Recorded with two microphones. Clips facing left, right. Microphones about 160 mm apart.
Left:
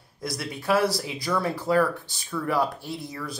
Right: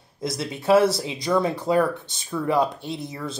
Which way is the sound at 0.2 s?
25° right (ahead or behind).